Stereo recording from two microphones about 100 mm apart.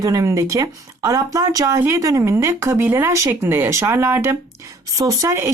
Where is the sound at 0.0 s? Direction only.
35° right (ahead or behind).